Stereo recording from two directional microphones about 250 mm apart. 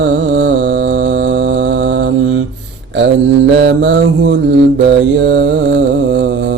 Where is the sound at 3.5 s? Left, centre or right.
Right.